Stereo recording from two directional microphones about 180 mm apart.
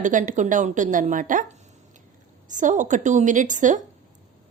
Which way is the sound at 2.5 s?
45° right (ahead or behind).